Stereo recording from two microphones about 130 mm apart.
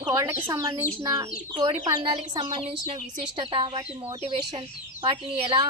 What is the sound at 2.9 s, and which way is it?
Speech, 45° right (ahead or behind).